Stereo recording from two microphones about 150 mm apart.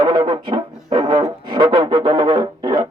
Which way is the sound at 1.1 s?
30° right (ahead or behind).